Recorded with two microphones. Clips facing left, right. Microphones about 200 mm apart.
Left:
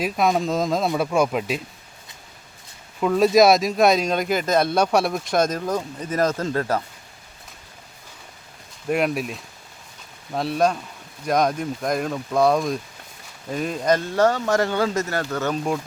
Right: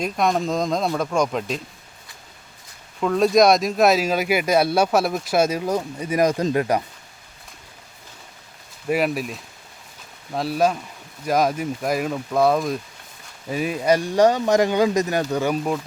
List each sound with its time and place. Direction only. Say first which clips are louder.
0.0 s speech: left 1 dB; centre (ahead or behind)
3.0 s speech: left 1 dB; 5° left (ahead or behind); by 6.8 s 15° right (ahead or behind)
8.9 s speech: even; 5° right (ahead or behind)